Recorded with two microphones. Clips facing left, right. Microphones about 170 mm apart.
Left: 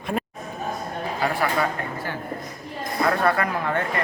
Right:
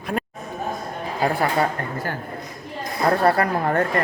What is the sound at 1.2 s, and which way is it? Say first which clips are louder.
Speech: right 3 dB; 35° right (ahead or behind).